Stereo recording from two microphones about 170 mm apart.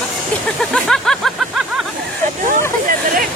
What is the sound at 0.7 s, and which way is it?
Speech, 5° left (ahead or behind).